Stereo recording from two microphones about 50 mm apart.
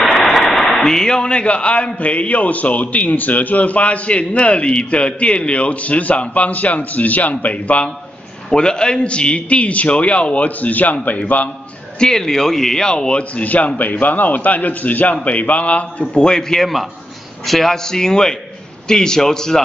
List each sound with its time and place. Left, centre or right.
0.0 s speech: centre; by 7.9 s left
8.5 s speech: centre
12.0 s a man's voice: centre